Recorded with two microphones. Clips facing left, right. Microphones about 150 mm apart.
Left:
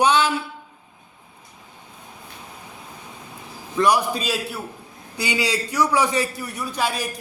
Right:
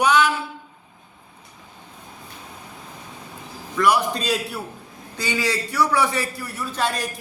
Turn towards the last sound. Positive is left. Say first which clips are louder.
# even
turn(degrees=5)  # may be behind; listen again after turning